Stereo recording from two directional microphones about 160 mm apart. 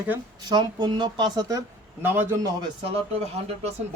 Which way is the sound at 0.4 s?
25° right (ahead or behind).